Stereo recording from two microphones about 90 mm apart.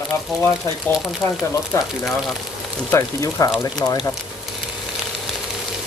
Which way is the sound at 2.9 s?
35° left (ahead or behind).